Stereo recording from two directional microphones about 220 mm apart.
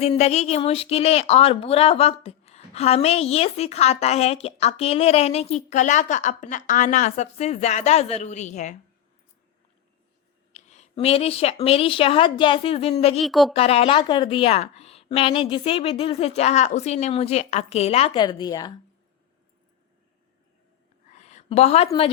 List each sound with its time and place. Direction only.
0.0 s speech: 30° left (ahead or behind)
10.5 s a woman's voice: 30° left (ahead or behind)
13.1 s speech: centre (ahead or behind)
13.5 s speech: 25° left (ahead or behind)
21.1 s a sound: 30° left (ahead or behind)